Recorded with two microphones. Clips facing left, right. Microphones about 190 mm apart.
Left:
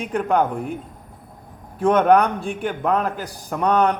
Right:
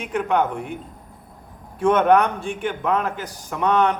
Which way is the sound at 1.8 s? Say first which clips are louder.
Left 1 dB; 35° left (ahead or behind).